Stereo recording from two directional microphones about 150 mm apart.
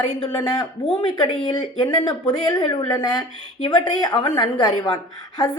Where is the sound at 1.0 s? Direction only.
30° left (ahead or behind).